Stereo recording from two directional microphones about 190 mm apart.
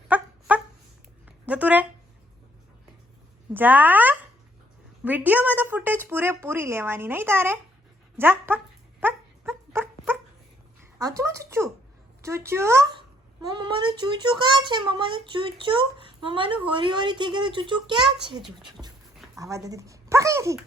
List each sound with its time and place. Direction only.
0.1 s dog: 10° right (ahead or behind)
1.2 s a sound: 5° right (ahead or behind)
3.5 s speech: 10° right (ahead or behind)
8.2 s dog: 10° right (ahead or behind)
10.9 s a child's voice: 15° right (ahead or behind)
18.8 s speech: 5° right (ahead or behind)
19.4 s speech: 15° right (ahead or behind)